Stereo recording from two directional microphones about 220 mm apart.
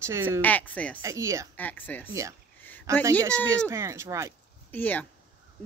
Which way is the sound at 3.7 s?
15° right (ahead or behind).